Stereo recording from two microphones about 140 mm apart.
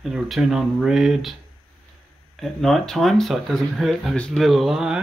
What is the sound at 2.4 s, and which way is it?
Speech, centre (ahead or behind).